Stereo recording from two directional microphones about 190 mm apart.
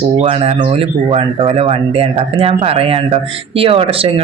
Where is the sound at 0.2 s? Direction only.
35° right (ahead or behind).